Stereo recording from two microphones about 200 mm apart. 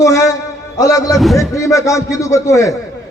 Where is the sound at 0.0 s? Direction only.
15° left (ahead or behind).